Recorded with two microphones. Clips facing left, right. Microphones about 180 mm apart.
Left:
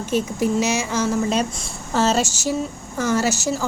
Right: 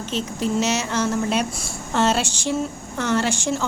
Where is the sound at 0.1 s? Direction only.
10° left (ahead or behind).